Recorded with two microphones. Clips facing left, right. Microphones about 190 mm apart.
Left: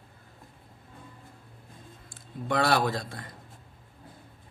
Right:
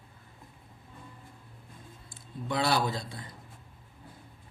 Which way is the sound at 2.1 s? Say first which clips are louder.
Left 4 dB; 55° left (ahead or behind).